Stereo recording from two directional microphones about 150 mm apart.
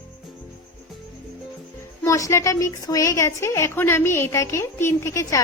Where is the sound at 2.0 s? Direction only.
20° left (ahead or behind).